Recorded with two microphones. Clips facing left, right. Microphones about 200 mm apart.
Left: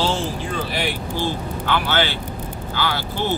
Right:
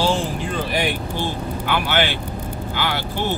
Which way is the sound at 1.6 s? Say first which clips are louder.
Even; 15° right (ahead or behind).